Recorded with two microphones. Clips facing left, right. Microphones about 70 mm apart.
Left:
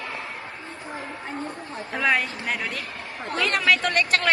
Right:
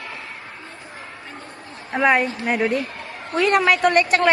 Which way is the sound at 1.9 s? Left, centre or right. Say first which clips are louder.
Right 6 dB; right.